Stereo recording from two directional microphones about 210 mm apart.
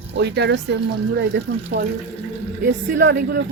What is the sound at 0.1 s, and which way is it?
Speech, 50° right (ahead or behind).